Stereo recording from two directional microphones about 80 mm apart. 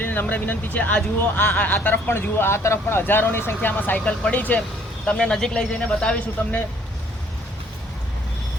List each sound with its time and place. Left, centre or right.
0.0 s speech: left
5.1 s speech: centre